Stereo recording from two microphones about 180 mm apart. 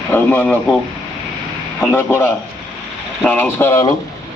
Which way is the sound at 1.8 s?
10° left (ahead or behind).